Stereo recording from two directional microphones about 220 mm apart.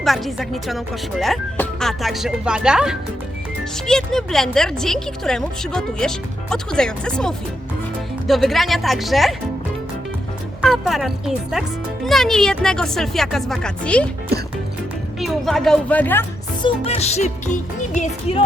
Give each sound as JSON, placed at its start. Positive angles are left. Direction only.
{"t": 0.0, "sound": "speech", "side_deg": 0}
{"t": 10.6, "sound": "speech", "side_deg": 0}
{"t": 15.2, "sound": "speech", "side_deg": 0}
{"t": 16.6, "sound": "music", "side_deg": 30}